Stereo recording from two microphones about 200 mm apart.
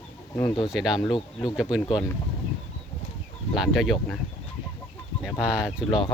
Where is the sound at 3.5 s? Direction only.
Centre (ahead or behind).